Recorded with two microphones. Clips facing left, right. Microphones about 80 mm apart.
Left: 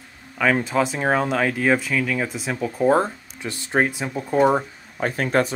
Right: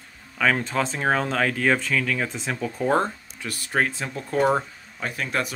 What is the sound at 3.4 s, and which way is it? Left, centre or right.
Speech, left.